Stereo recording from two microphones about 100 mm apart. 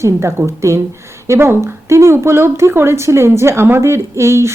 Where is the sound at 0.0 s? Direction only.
30° right (ahead or behind).